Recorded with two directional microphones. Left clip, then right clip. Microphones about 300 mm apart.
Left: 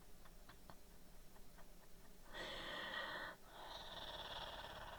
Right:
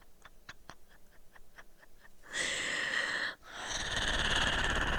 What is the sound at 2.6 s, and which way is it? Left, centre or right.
Frog, right.